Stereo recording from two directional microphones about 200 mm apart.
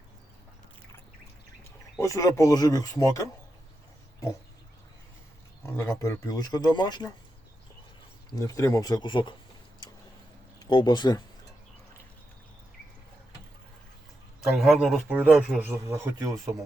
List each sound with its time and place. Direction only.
2.0 s speech: 15° left (ahead or behind)
5.6 s speech: 15° left (ahead or behind)
8.4 s speech: 15° left (ahead or behind)
10.7 s speech: 20° left (ahead or behind)
14.5 s a man's voice: centre (ahead or behind)